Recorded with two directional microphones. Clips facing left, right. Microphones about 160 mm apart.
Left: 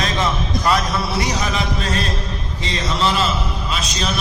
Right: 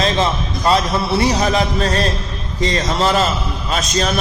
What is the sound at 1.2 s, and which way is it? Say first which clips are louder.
A man's voice: right 6 dB; 40° right (ahead or behind).